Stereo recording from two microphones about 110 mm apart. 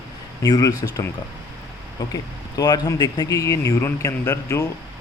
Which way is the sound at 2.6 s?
35° left (ahead or behind).